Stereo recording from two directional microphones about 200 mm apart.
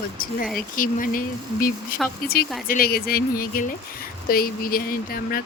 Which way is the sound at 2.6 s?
45° left (ahead or behind).